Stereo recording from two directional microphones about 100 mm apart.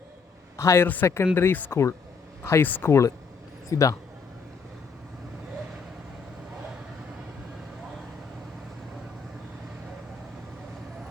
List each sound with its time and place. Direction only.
0.5 s a man's voice: 30° left (ahead or behind)